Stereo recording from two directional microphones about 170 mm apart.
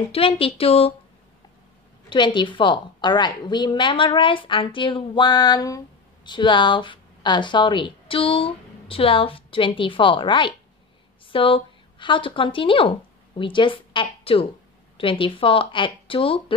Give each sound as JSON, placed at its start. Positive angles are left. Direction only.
{"t": 0.1, "sound": "speech", "side_deg": 35}
{"t": 2.0, "sound": "a woman's voice", "side_deg": 30}